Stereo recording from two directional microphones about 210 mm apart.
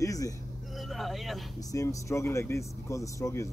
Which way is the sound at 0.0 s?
15° left (ahead or behind).